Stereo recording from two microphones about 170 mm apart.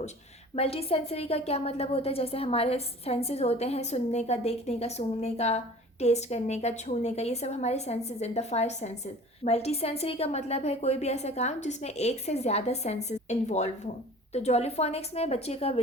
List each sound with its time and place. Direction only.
0.5 s a woman's voice: 35° left (ahead or behind)